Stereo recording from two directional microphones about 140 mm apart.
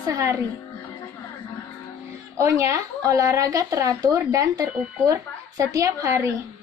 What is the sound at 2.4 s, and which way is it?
Speech, 20° right (ahead or behind).